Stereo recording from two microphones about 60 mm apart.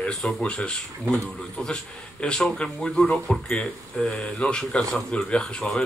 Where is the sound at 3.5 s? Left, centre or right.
Centre.